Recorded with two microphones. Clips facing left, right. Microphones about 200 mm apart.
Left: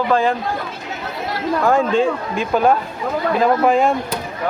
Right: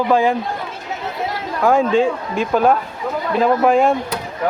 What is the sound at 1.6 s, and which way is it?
Speech, 5° right (ahead or behind).